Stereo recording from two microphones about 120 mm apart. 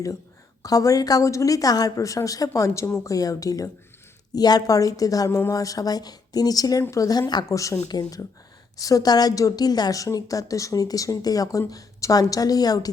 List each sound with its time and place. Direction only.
0.6 s a woman's voice: 30° left (ahead or behind)